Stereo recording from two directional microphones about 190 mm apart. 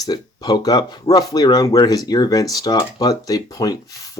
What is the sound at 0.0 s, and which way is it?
Speech, 20° left (ahead or behind).